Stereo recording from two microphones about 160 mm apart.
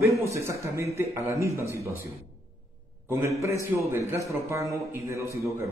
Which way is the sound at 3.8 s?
15° right (ahead or behind).